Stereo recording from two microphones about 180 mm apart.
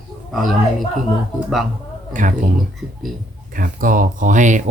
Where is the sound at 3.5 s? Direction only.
50° right (ahead or behind).